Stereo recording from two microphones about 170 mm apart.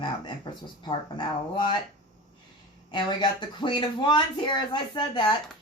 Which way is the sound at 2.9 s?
25° left (ahead or behind).